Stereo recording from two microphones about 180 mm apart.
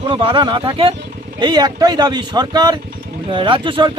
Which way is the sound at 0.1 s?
25° right (ahead or behind).